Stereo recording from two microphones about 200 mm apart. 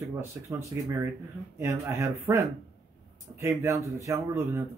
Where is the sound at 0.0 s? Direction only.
15° right (ahead or behind).